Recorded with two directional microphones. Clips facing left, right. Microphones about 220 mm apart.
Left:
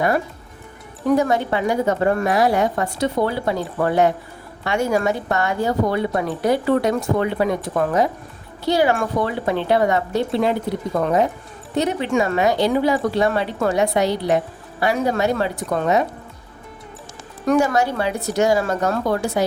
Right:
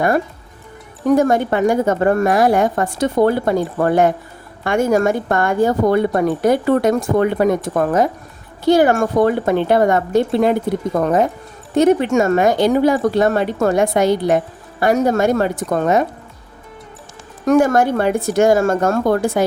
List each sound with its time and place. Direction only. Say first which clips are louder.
1.1 s speech: right 4 dB; 50° right (ahead or behind)
17.4 s speech: right 4 dB; 45° right (ahead or behind)